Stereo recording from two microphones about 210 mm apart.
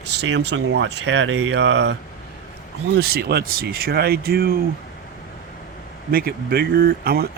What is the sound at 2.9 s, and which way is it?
Speech, 50° right (ahead or behind).